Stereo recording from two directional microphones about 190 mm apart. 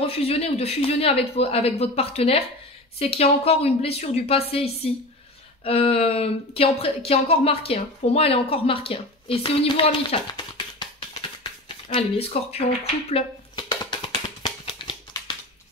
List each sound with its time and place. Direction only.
0.0 s speech: 30° left (ahead or behind)
13.1 s music: 25° left (ahead or behind)